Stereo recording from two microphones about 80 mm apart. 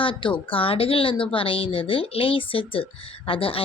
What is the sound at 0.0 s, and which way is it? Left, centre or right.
Speech, left.